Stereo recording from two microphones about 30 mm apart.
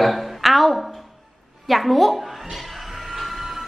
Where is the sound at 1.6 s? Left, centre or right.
Centre.